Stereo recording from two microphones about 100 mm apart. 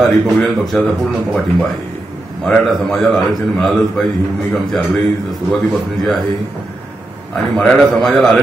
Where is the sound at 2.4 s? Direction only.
5° left (ahead or behind).